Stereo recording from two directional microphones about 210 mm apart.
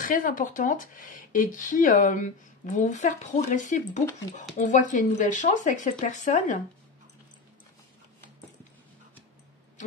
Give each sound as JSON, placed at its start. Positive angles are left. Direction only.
{"t": 0.0, "sound": "speech", "side_deg": 40}